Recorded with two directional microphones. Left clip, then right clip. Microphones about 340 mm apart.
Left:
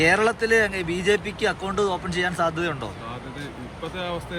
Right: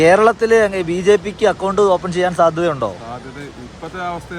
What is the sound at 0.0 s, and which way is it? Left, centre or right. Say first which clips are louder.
Speech: right 9 dB; right.